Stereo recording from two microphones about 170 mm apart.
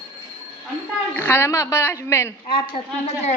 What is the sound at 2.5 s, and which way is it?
Speech, 35° left (ahead or behind).